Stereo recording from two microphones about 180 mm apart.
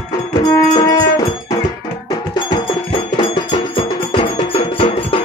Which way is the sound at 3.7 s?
30° left (ahead or behind).